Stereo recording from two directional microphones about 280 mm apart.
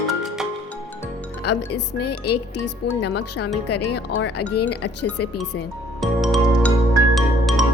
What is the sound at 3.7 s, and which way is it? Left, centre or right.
Speech, left.